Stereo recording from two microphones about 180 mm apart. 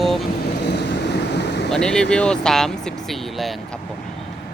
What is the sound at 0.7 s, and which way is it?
Vehicle, 70° left (ahead or behind).